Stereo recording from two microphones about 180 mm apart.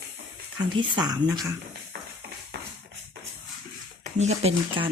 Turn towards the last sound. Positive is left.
turn(degrees=-35)  # may be behind; listen again after turning